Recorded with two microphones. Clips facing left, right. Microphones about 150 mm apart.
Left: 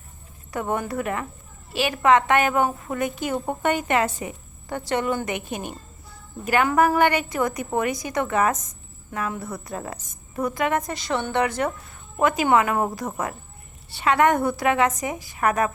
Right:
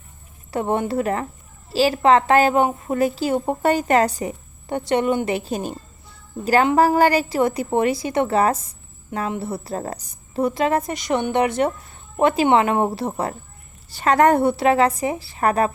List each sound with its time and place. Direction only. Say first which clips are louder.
0.5 s a woman's voice: right 5 dB; 30° right (ahead or behind)
4.9 s a woman's voice: right 5 dB; 20° right (ahead or behind)
5.5 s a woman's voice: right 5 dB; 35° right (ahead or behind)
13.9 s a woman's voice: right 4 dB; 40° right (ahead or behind)